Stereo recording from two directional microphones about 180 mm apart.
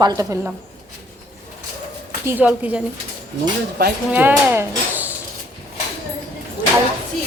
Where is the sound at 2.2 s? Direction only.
10° right (ahead or behind).